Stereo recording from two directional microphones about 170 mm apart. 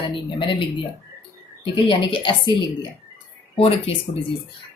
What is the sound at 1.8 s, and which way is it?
A woman's voice, 30° left (ahead or behind).